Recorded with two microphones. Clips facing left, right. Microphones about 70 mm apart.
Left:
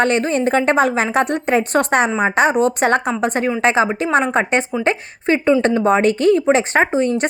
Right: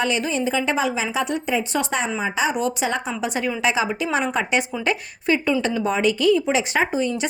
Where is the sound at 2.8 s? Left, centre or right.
Left.